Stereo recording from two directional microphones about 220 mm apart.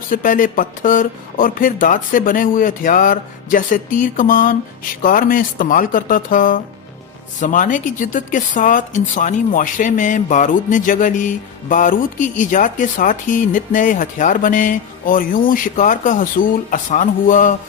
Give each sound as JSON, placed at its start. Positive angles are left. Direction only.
{"t": 0.1, "sound": "speech", "side_deg": 40}